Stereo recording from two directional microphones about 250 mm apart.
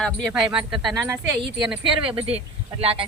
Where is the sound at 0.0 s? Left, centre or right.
Centre.